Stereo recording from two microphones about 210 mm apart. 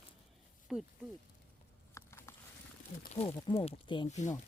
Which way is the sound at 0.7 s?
Centre (ahead or behind).